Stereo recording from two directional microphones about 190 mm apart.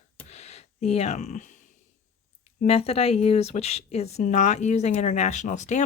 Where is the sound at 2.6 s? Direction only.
30° left (ahead or behind).